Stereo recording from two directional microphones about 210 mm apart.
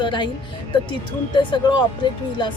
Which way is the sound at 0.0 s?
20° left (ahead or behind).